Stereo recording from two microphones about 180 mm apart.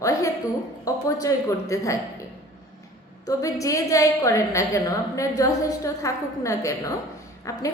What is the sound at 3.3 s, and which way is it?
A woman's voice, 20° left (ahead or behind).